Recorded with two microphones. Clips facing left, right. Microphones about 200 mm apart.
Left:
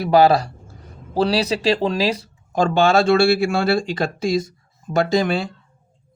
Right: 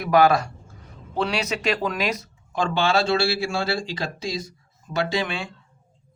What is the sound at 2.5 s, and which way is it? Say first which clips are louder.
Speech: left 6 dB; 45° left (ahead or behind).